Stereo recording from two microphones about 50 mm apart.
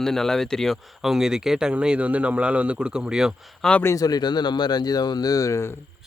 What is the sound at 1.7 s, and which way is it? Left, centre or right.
Speech, right.